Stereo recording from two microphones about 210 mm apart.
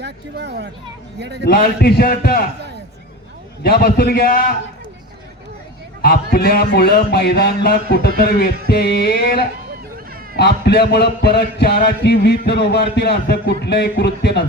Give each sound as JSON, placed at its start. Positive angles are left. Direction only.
{"t": 0.0, "sound": "speech", "side_deg": -55}
{"t": 1.5, "sound": "a man's voice", "side_deg": 45}
{"t": 3.6, "sound": "a man's voice", "side_deg": 45}
{"t": 6.3, "sound": "a man's voice", "side_deg": 50}